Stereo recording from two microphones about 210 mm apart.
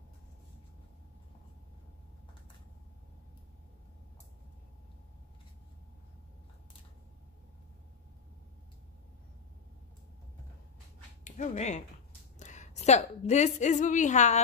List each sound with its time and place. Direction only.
11.2 s a woman's voice: 35° left (ahead or behind)